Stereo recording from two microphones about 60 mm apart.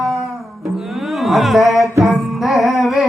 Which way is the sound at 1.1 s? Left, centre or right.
Centre.